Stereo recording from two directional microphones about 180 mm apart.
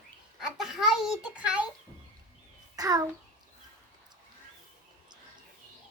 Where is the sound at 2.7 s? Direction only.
20° right (ahead or behind).